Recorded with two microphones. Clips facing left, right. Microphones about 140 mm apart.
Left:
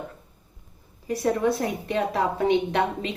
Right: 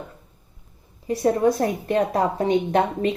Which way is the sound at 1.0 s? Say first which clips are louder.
Right 4 dB; 35° right (ahead or behind).